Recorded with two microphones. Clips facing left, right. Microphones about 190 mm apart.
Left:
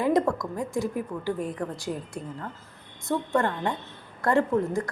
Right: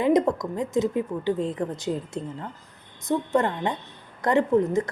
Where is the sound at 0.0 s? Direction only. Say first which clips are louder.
Right 3 dB; 20° right (ahead or behind).